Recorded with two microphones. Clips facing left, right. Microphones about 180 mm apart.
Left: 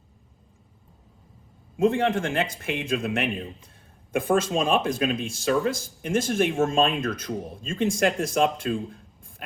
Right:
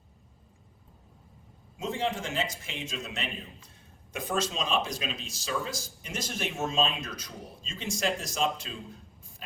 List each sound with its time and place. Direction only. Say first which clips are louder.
1.7 s a man's voice: left 10 dB; 55° left (ahead or behind)